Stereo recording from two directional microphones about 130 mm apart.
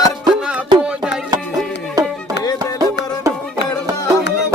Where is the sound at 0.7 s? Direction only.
35° right (ahead or behind).